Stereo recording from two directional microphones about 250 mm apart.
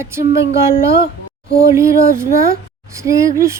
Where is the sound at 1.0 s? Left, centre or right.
Left.